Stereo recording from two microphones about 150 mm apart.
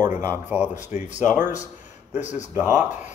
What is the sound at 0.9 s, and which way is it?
Speech, 50° left (ahead or behind).